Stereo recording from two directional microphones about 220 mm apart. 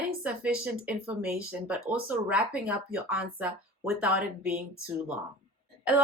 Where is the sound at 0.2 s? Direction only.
5° right (ahead or behind).